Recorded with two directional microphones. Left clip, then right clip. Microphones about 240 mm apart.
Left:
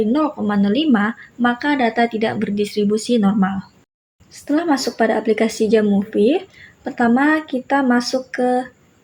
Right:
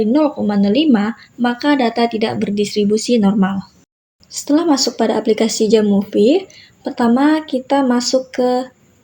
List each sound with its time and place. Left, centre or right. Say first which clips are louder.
0.0 s speech: right 4 dB; centre